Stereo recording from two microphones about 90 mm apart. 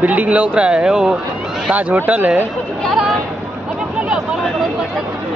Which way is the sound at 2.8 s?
5° left (ahead or behind).